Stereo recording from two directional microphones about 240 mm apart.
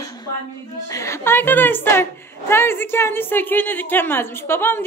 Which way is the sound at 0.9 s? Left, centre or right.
Centre.